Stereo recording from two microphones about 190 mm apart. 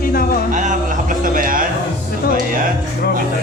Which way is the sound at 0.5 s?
40° right (ahead or behind).